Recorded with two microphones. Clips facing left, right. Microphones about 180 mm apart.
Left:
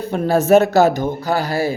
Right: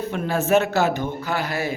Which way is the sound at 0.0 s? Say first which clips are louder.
Left 6 dB; 35° left (ahead or behind).